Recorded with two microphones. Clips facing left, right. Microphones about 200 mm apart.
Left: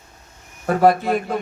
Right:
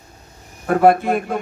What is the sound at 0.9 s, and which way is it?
Speech, 50° right (ahead or behind).